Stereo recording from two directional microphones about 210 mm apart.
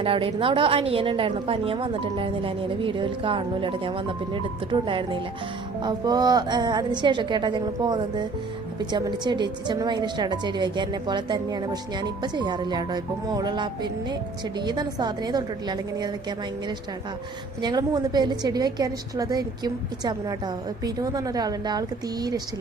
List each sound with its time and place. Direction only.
0.0 s a woman's voice: 25° right (ahead or behind)
17.6 s a woman's voice: 20° right (ahead or behind)